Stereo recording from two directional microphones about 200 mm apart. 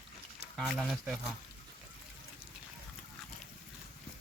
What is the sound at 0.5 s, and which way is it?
Speech, centre (ahead or behind).